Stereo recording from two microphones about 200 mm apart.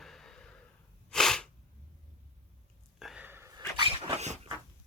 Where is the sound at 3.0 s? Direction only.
5° right (ahead or behind); by 4.4 s 30° right (ahead or behind).